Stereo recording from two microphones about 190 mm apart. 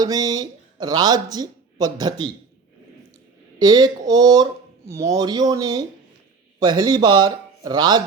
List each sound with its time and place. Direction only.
0.0 s speech: 20° right (ahead or behind)
3.6 s speech: 20° right (ahead or behind)